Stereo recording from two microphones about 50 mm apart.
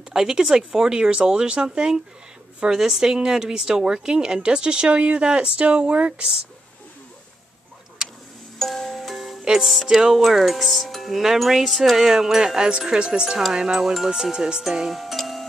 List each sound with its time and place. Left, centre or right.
0.1 s a woman's voice: centre
8.5 s music: centre
9.4 s music: centre
9.8 s speech: centre
12.1 s a woman's voice: centre